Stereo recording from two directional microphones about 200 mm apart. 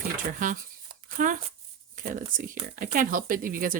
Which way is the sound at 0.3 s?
40° right (ahead or behind).